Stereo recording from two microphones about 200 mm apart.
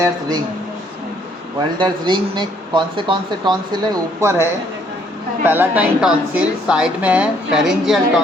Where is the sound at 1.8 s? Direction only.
25° right (ahead or behind); by 8.0 s centre (ahead or behind).